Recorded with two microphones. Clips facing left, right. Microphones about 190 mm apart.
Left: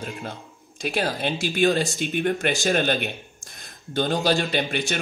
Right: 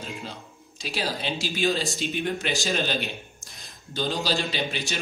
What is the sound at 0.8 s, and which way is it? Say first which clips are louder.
Speech: left 5 dB; 55° left (ahead or behind).